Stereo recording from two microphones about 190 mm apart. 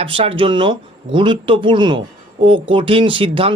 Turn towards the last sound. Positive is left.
turn(degrees=-25)  # may be behind; listen again after turning